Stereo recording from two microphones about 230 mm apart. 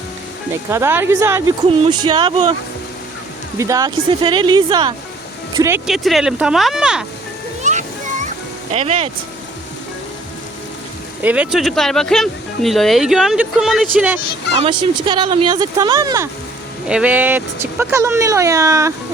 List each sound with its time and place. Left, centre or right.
0.7 s speech: centre
3.6 s speech: centre
7.6 s music: right
8.7 s speech: right
11.2 s speech: centre
14.6 s speech: right